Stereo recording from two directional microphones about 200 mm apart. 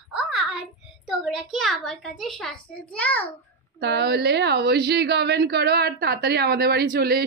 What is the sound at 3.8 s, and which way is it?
A woman's voice, 55° right (ahead or behind).